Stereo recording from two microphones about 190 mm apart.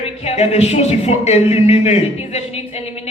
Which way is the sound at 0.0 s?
35° left (ahead or behind).